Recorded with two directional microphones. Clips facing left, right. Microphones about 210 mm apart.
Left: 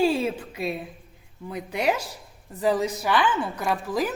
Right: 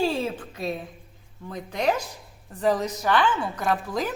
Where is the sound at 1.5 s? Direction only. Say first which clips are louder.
Even; 10° left (ahead or behind).